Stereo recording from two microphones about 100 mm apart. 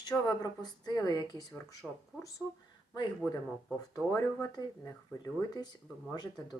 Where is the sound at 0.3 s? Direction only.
40° left (ahead or behind).